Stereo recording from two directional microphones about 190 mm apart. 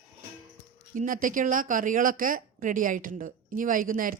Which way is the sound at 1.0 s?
45° right (ahead or behind).